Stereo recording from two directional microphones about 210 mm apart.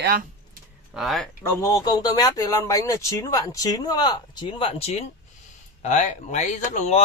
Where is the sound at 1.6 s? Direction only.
15° left (ahead or behind).